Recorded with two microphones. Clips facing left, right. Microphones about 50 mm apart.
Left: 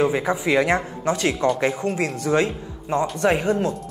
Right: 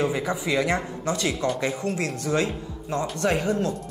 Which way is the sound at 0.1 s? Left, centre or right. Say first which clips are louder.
Left 5 dB; centre.